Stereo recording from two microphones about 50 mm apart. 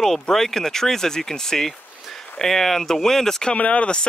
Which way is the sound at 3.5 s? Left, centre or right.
Left.